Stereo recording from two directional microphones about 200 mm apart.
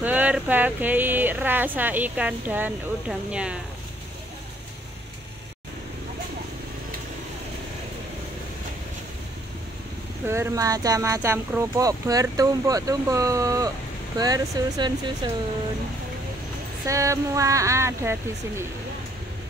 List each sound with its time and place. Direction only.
0.0 s speech: 10° right (ahead or behind)
10.2 s speech: 15° right (ahead or behind)
16.8 s speech: 15° right (ahead or behind)